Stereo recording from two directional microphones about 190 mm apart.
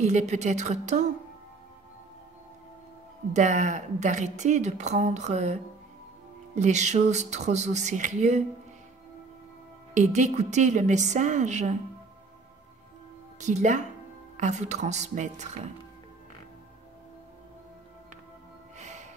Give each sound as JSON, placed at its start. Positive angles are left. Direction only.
{"t": 0.0, "sound": "a woman's voice", "side_deg": -40}
{"t": 3.3, "sound": "a woman's voice", "side_deg": -40}
{"t": 9.9, "sound": "a woman's voice", "side_deg": -40}
{"t": 13.4, "sound": "a woman's voice", "side_deg": -40}
{"t": 18.8, "sound": "music", "side_deg": -40}